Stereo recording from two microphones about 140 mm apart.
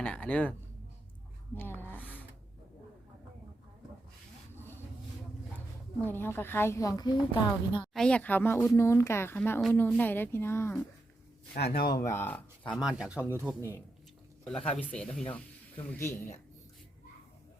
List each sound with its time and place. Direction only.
0.0 s music: 10° left (ahead or behind)
1.5 s speech: 15° left (ahead or behind)
4.5 s vehicle: 15° left (ahead or behind)
5.5 s speech: 15° left (ahead or behind); by 7.9 s 35° left (ahead or behind)
7.9 s speech: 5° left (ahead or behind)
11.5 s speech: 90° left
11.9 s speech: 20° left (ahead or behind)
12.7 s speech: 5° right (ahead or behind)
14.5 s speech: 45° left (ahead or behind)
14.8 s speech: 10° left (ahead or behind)